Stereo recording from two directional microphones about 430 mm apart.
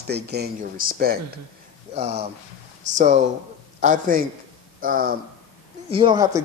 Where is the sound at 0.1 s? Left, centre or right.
Right.